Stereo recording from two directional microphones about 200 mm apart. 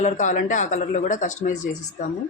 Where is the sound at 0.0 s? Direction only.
35° left (ahead or behind).